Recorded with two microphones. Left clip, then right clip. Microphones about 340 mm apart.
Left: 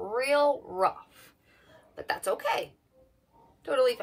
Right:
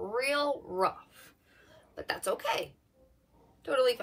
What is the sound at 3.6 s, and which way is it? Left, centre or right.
Speech, centre.